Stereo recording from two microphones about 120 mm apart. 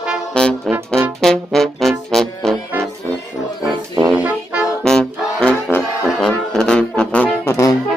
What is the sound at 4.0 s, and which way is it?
Music, 10° right (ahead or behind).